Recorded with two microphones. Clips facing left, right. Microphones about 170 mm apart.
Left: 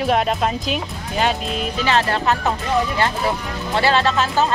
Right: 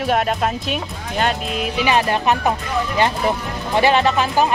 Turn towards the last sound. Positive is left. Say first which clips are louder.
# right 2 dB
turn(degrees=-15)  # may be behind; listen again after turning